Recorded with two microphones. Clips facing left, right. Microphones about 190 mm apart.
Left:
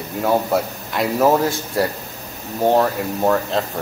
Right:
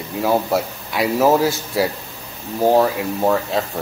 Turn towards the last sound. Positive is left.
turn(degrees=-5)  # may be behind; listen again after turning